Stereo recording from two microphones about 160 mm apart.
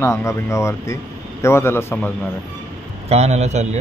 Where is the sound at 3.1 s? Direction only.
45° right (ahead or behind).